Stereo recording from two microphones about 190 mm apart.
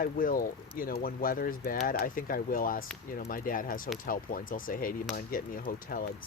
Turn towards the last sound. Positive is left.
turn(degrees=50)  # may be behind; listen again after turning